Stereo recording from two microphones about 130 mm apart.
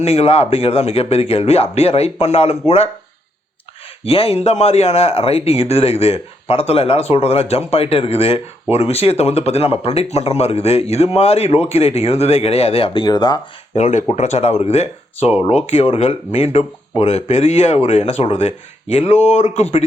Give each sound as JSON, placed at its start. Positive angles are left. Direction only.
{"t": 0.0, "sound": "speech", "side_deg": 50}
{"t": 4.0, "sound": "speech", "side_deg": 50}
{"t": 13.7, "sound": "speech", "side_deg": 65}